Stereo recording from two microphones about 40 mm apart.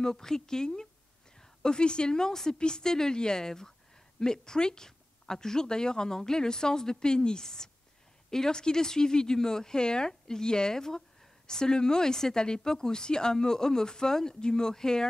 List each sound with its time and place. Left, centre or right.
0.0 s speech: centre